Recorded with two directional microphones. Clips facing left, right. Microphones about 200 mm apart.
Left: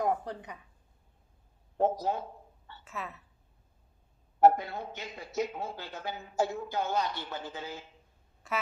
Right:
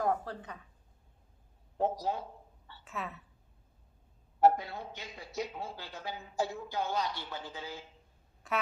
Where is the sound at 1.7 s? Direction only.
55° left (ahead or behind).